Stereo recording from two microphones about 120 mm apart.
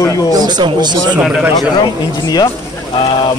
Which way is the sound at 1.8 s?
35° left (ahead or behind).